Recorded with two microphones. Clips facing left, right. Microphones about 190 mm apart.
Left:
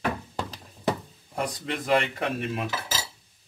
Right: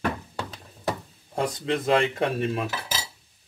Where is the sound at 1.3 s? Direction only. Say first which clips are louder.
Right 4 dB; 25° right (ahead or behind).